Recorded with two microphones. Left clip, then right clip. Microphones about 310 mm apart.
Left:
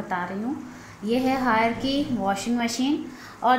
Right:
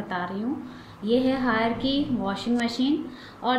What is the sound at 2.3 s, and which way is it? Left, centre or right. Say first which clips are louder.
Speech: left 2 dB; centre.